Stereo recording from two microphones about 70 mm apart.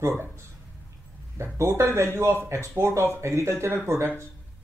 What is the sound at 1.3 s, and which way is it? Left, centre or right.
Speech, right.